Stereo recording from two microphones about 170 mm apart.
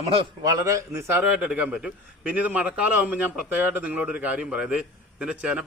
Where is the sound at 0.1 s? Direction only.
30° right (ahead or behind).